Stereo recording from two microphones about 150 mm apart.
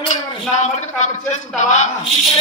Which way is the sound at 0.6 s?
50° left (ahead or behind).